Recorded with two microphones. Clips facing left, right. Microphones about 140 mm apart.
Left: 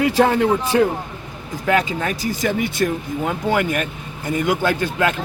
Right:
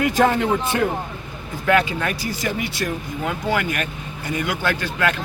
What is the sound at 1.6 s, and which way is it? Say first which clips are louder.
Speech: even; 30° left (ahead or behind).